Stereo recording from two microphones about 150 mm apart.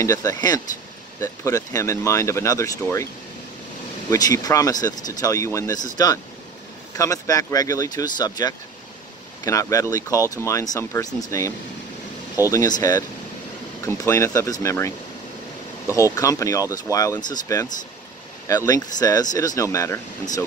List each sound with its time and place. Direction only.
0.0 s speech: 25° left (ahead or behind)
4.1 s speech: 25° left (ahead or behind)
7.0 s speech: 20° left (ahead or behind)
15.9 s speech: 20° left (ahead or behind)